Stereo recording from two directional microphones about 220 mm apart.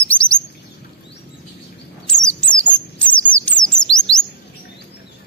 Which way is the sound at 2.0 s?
5° left (ahead or behind).